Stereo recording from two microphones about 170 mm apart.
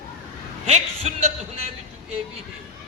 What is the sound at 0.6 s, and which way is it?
Speech, 40° right (ahead or behind).